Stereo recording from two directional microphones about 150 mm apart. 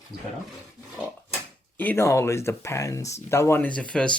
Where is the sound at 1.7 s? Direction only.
15° left (ahead or behind).